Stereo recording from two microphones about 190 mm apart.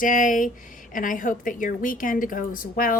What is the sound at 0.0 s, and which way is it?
A woman's voice, 45° left (ahead or behind).